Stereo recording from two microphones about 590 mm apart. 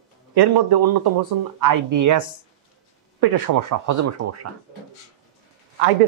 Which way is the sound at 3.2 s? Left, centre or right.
Right.